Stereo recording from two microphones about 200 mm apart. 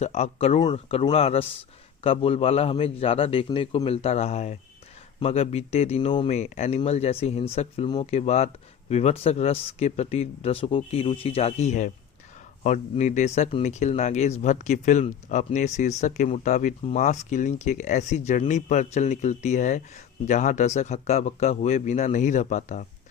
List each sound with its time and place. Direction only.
0.0 s a man's voice: 35° left (ahead or behind)